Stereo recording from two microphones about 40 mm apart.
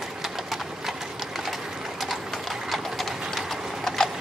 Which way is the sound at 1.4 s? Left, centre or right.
Centre.